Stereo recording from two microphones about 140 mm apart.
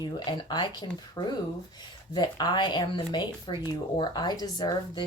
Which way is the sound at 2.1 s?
30° left (ahead or behind).